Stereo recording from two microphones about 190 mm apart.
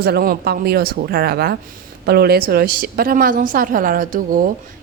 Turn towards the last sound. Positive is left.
turn(degrees=-45)  # may be behind; listen again after turning